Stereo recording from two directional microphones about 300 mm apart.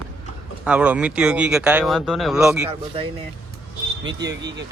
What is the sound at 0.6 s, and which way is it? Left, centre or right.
Speech, centre.